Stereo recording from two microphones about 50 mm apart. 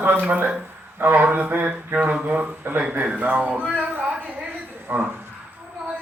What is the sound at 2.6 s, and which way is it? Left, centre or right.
Speech, right.